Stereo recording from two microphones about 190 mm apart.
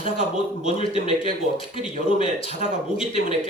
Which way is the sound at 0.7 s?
30° left (ahead or behind).